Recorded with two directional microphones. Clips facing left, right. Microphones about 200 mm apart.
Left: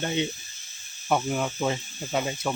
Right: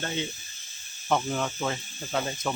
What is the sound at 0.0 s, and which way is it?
Speech, 20° left (ahead or behind).